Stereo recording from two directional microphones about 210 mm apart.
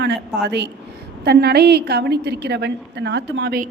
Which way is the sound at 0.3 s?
55° right (ahead or behind).